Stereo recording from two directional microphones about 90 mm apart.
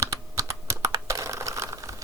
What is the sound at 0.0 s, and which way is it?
Computer keyboard, 35° right (ahead or behind).